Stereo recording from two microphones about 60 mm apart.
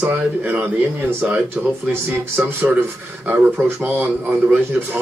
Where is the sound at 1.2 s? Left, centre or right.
Centre.